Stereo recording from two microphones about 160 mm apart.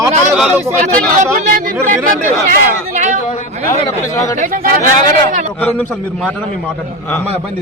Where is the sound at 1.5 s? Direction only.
55° right (ahead or behind).